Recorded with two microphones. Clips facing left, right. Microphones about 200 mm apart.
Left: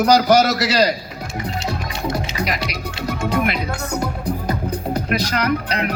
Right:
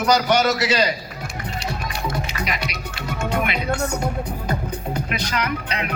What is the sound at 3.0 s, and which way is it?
Music, 40° left (ahead or behind).